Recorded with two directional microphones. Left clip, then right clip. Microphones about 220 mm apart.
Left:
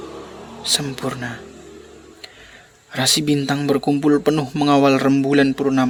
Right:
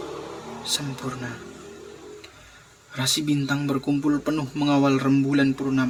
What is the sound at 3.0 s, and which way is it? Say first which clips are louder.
Speech: left 6 dB; 35° left (ahead or behind).